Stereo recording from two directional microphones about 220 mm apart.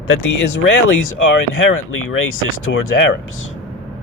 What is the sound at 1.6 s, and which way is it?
Speech, 60° left (ahead or behind).